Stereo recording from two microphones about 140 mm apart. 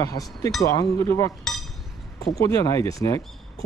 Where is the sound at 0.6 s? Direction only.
25° left (ahead or behind).